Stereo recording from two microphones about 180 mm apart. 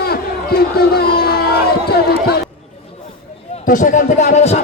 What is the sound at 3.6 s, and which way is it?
Speech, 45° left (ahead or behind).